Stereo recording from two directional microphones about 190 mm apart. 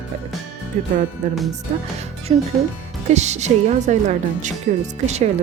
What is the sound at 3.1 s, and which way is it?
A woman's voice, 35° right (ahead or behind).